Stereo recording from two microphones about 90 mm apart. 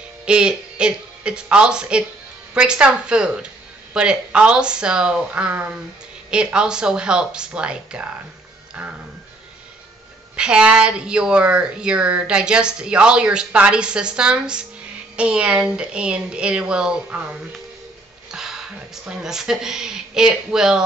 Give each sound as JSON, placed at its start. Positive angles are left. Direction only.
{"t": 0.2, "sound": "a woman's voice", "side_deg": -10}
{"t": 6.3, "sound": "a woman's voice", "side_deg": -10}
{"t": 10.3, "sound": "a woman's voice", "side_deg": -10}